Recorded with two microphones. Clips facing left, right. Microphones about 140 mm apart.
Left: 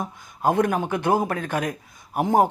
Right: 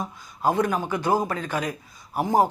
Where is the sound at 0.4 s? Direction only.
55° left (ahead or behind).